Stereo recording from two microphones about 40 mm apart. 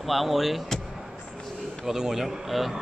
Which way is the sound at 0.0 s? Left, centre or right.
Centre.